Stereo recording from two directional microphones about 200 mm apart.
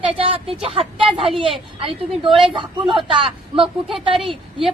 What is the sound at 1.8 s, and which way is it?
Speech, 25° right (ahead or behind).